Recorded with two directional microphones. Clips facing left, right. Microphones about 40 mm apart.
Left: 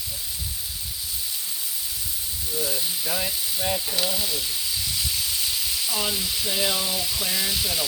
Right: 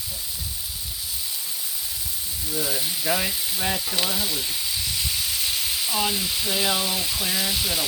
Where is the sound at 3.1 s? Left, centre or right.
Right.